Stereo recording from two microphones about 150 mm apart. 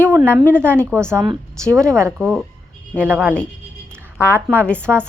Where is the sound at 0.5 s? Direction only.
15° right (ahead or behind).